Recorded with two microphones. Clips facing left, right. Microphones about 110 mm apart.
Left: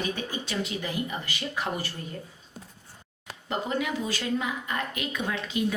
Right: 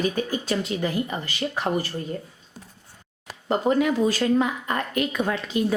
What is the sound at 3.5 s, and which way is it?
Speech, 45° right (ahead or behind).